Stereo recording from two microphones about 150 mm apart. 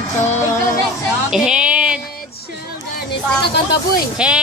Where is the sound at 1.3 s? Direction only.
5° right (ahead or behind).